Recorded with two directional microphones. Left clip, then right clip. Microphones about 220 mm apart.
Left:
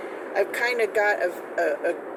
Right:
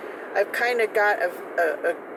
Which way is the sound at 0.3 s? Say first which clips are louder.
Right 1 dB; 15° right (ahead or behind).